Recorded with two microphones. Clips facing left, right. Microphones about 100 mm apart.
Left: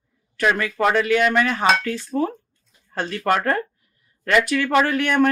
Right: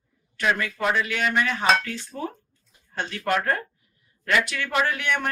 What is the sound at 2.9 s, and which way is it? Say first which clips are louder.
Speech: left 5 dB; 40° left (ahead or behind).